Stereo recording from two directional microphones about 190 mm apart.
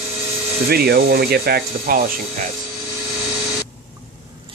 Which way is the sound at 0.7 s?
55° right (ahead or behind).